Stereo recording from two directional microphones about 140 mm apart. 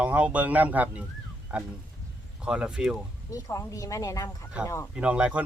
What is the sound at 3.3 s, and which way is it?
Speech, 25° left (ahead or behind).